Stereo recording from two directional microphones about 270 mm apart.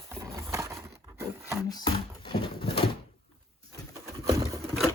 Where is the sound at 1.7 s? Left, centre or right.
Centre.